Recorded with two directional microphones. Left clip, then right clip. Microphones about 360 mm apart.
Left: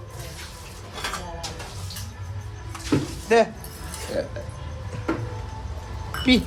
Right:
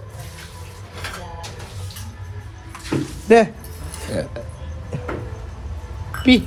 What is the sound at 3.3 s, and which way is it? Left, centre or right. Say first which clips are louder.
Speech: right 6 dB; centre.